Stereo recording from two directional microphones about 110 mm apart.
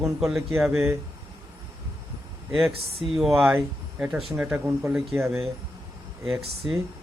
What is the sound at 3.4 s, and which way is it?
Speech, 20° right (ahead or behind).